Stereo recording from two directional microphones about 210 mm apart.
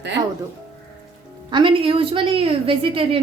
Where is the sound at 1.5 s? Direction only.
25° right (ahead or behind).